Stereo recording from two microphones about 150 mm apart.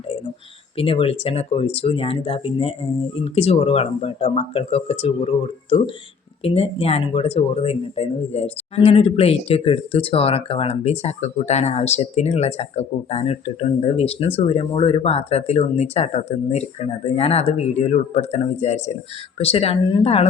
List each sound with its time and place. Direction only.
0.8 s speech: 40° left (ahead or behind)